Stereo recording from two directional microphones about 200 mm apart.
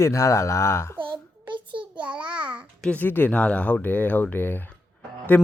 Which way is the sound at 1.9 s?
5° right (ahead or behind).